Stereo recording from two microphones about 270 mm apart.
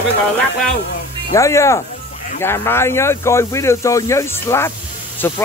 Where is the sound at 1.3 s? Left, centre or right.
Centre.